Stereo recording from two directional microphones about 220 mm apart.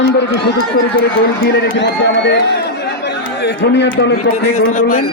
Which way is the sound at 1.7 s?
50° left (ahead or behind).